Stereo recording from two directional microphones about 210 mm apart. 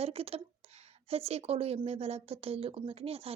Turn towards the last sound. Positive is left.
turn(degrees=-30)  # may be behind; listen again after turning